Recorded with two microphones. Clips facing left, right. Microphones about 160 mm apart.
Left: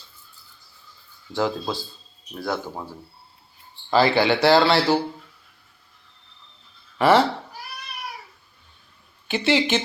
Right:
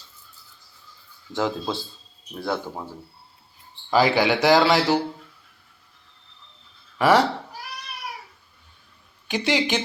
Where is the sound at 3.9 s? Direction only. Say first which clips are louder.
Left 1 dB; 15° right (ahead or behind).